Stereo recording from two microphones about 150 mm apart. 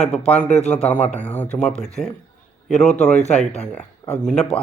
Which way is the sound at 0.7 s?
10° left (ahead or behind).